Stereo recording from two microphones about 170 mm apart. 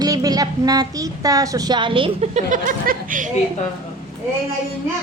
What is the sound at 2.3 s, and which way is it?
Speech, 50° right (ahead or behind).